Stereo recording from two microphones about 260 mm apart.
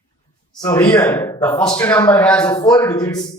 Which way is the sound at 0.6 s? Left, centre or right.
Centre.